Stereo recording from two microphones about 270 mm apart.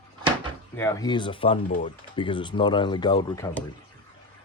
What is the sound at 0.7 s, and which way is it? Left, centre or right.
Speech, centre.